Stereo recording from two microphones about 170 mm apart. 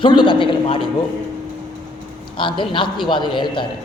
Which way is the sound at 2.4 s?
30° left (ahead or behind).